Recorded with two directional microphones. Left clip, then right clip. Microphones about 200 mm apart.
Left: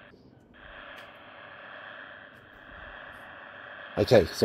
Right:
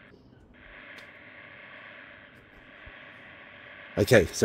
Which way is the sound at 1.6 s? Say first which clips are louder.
Left 3 dB; 25° left (ahead or behind).